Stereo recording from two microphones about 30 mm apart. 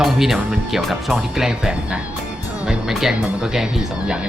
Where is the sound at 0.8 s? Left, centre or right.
Centre.